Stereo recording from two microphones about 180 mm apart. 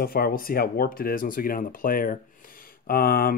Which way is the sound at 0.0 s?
55° left (ahead or behind).